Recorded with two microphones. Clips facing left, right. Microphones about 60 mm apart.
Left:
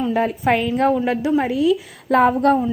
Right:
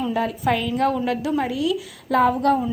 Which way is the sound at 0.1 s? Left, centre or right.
Left.